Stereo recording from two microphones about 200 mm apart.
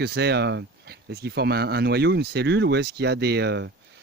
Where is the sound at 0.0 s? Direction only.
55° right (ahead or behind).